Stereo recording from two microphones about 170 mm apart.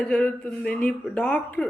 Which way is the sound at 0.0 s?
10° left (ahead or behind).